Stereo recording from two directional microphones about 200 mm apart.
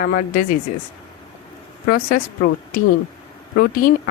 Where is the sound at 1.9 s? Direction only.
45° left (ahead or behind).